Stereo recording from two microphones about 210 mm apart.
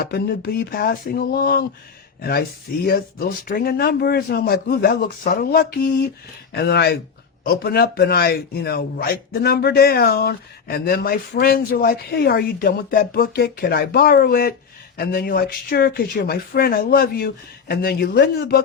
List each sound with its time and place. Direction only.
0.0 s a man's voice: 45° left (ahead or behind)
2.8 s a man's voice: 45° left (ahead or behind)